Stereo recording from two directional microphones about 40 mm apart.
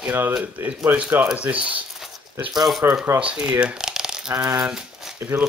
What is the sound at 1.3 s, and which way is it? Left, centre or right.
Speech, right.